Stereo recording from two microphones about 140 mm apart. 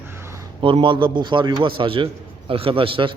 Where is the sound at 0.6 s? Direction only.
40° right (ahead or behind).